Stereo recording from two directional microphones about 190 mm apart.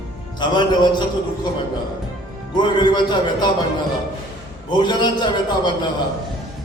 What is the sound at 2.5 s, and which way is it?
Speech, 25° left (ahead or behind).